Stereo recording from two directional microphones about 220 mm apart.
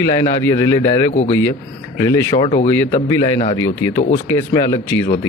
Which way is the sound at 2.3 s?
25° left (ahead or behind).